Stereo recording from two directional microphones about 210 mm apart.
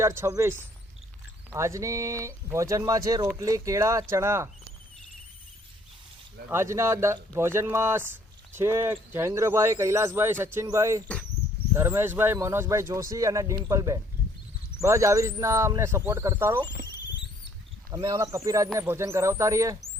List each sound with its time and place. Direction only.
0.0 s speech: 15° right (ahead or behind)
6.5 s speech: 10° right (ahead or behind)
17.9 s speech: 15° right (ahead or behind)